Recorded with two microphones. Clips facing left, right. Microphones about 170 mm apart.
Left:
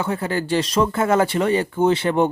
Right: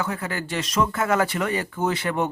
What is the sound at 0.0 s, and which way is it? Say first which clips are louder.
Speech: left 5 dB; 30° left (ahead or behind).